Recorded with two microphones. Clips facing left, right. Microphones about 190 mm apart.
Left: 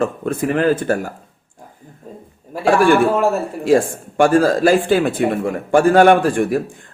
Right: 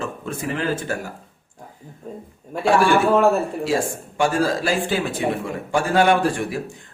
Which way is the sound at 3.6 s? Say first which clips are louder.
Left 8 dB; 50° left (ahead or behind).